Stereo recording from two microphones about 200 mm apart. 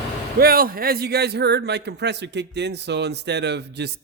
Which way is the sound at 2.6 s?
60° right (ahead or behind).